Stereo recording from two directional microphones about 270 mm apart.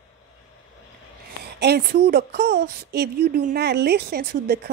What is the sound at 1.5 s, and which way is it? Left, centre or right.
A woman's voice, right.